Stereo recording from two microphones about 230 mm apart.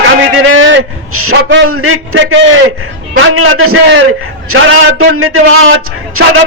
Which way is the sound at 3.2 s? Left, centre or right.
Right.